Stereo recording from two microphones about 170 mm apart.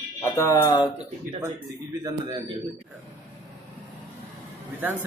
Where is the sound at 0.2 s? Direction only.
15° left (ahead or behind).